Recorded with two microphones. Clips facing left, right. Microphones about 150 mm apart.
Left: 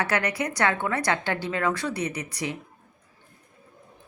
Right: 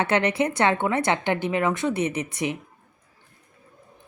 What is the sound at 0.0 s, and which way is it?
A woman's voice, 25° right (ahead or behind).